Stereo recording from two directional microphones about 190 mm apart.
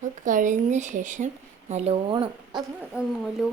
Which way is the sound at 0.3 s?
40° right (ahead or behind).